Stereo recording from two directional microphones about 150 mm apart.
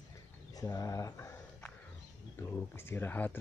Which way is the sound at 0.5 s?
25° left (ahead or behind).